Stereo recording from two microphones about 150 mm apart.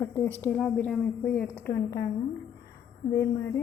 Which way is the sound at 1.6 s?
15° left (ahead or behind).